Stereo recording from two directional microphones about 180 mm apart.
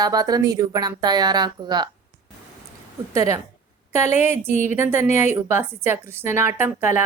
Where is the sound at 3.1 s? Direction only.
15° right (ahead or behind).